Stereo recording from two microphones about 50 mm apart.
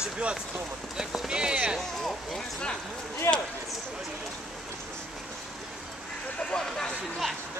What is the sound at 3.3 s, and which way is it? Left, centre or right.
Speech, left.